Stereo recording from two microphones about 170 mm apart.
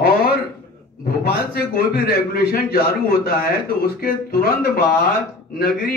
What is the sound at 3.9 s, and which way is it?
A man's voice, 60° left (ahead or behind).